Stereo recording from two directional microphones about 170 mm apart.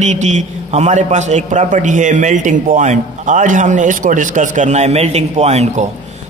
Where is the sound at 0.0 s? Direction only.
45° right (ahead or behind).